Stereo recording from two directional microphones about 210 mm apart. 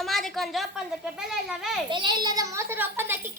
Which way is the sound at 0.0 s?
Centre (ahead or behind).